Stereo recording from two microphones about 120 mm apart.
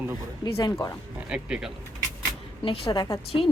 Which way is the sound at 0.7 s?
30° left (ahead or behind).